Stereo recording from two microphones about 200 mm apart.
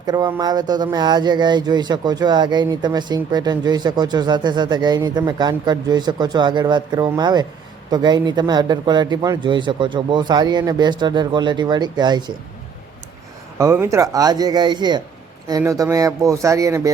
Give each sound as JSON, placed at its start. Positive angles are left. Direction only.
{"t": 0.0, "sound": "speech", "side_deg": -20}
{"t": 13.6, "sound": "speech", "side_deg": -15}